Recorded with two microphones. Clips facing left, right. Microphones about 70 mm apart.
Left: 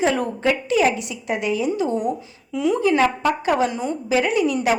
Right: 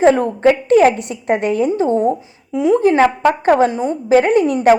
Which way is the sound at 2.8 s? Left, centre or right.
Right.